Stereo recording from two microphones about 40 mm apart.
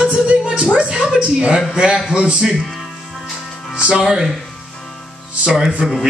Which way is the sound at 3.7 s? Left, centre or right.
Right.